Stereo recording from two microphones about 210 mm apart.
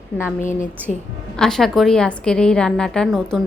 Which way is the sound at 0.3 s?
35° left (ahead or behind).